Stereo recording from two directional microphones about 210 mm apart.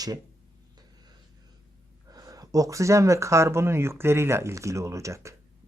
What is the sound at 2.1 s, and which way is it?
Speech, 15° right (ahead or behind).